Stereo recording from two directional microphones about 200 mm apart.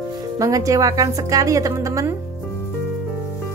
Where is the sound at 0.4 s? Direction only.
15° right (ahead or behind).